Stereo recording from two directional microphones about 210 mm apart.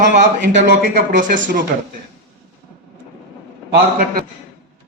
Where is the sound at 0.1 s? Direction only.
40° right (ahead or behind).